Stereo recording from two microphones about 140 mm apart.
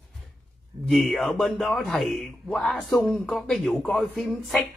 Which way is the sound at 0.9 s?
Centre (ahead or behind).